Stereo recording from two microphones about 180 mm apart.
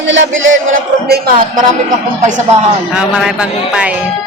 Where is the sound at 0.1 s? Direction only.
90° right; by 1.5 s 60° right (ahead or behind).